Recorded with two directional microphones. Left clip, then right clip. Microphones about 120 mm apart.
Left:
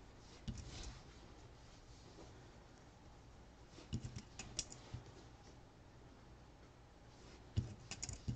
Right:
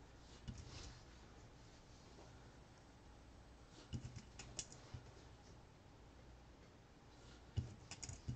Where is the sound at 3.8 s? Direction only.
30° left (ahead or behind).